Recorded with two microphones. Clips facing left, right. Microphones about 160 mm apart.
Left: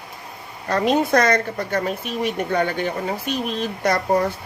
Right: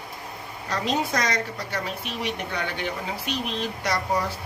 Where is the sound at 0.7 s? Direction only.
55° left (ahead or behind).